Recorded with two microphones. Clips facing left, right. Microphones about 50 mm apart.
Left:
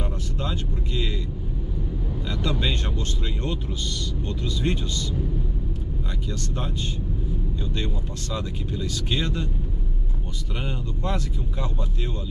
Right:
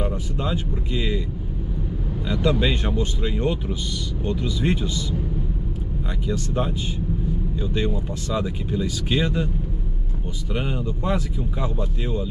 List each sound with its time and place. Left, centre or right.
0.0 s speech: centre
2.2 s speech: centre
6.2 s speech: centre
7.7 s speech: centre
10.5 s speech: centre